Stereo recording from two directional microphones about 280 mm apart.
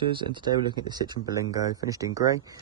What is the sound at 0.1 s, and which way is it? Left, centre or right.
Speech, centre.